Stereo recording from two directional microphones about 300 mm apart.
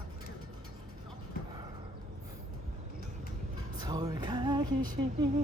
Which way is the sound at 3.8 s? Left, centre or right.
Centre.